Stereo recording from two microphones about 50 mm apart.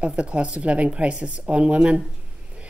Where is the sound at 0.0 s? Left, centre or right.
Right.